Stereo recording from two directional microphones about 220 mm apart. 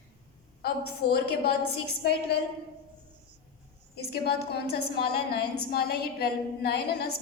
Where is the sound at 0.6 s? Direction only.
45° left (ahead or behind).